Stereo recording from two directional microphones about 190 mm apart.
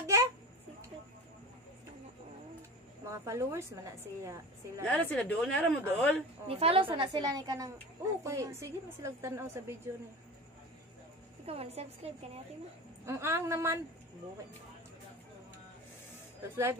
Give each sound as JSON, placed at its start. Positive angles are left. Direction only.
{"t": 0.0, "sound": "babbling", "side_deg": -15}
{"t": 3.1, "sound": "a woman's voice", "side_deg": -15}
{"t": 4.8, "sound": "speech", "side_deg": 5}
{"t": 6.4, "sound": "a woman's voice", "side_deg": -30}
{"t": 11.4, "sound": "a woman's voice", "side_deg": -30}
{"t": 13.0, "sound": "a woman's voice", "side_deg": -15}